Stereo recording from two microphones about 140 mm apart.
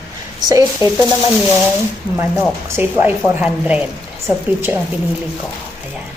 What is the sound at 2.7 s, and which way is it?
A woman's voice, 15° right (ahead or behind).